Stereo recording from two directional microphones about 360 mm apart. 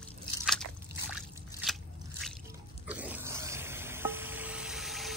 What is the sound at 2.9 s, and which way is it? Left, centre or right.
Stir, centre.